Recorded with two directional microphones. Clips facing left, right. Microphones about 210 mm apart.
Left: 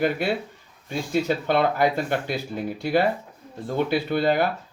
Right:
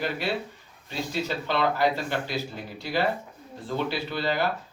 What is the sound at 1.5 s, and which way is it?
Speech, 55° left (ahead or behind).